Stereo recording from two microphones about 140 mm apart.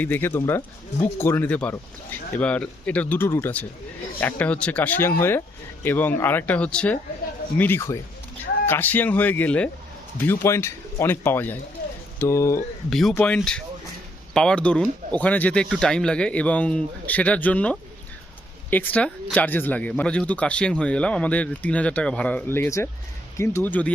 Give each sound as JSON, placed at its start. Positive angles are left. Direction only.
{"t": 0.0, "sound": "speech", "side_deg": 15}
{"t": 12.9, "sound": "speech", "side_deg": 0}